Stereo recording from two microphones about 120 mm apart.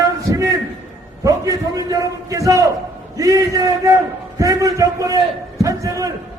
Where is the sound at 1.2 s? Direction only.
30° right (ahead or behind).